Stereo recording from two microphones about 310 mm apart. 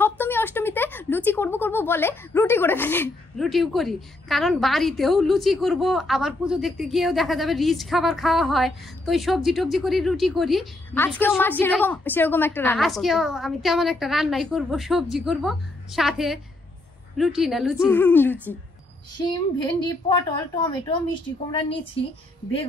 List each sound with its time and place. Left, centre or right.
0.0 s a woman's voice: centre